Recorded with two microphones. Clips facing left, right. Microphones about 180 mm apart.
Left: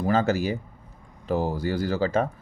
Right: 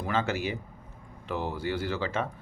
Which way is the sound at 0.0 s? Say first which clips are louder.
Left 7 dB; 40° left (ahead or behind).